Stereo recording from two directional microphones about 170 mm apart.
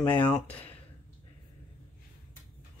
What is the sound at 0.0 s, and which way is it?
Speech, 10° left (ahead or behind).